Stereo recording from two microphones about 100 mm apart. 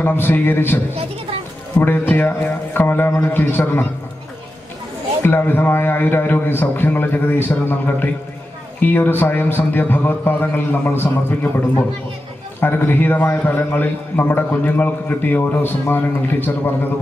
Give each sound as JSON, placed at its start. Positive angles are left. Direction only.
{"t": 0.0, "sound": "a man's voice", "side_deg": 20}
{"t": 1.8, "sound": "a man's voice", "side_deg": 20}
{"t": 5.2, "sound": "a man's voice", "side_deg": 20}
{"t": 12.5, "sound": "a man's voice", "side_deg": 20}